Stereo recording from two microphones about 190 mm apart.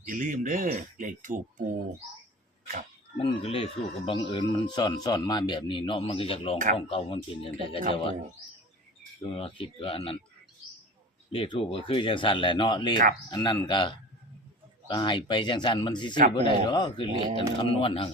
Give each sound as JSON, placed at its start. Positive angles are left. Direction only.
{"t": 0.0, "sound": "speech", "side_deg": -45}
{"t": 3.2, "sound": "speech", "side_deg": 30}
{"t": 9.3, "sound": "speech", "side_deg": 30}
{"t": 11.3, "sound": "speech", "side_deg": 30}